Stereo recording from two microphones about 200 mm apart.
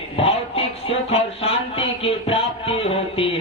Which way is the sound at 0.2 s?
30° left (ahead or behind).